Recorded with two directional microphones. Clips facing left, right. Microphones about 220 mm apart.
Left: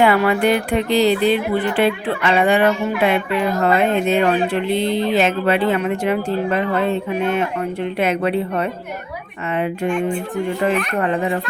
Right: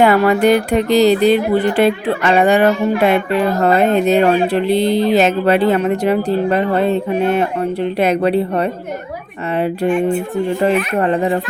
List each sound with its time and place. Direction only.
0.0 s speech: 40° right (ahead or behind)
11.0 s speech: 35° right (ahead or behind)